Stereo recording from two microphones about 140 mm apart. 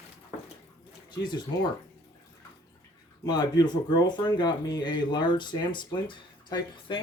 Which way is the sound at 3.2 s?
30° left (ahead or behind).